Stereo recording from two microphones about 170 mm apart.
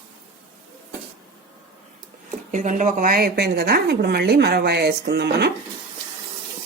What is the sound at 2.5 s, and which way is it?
A woman's voice, 45° right (ahead or behind).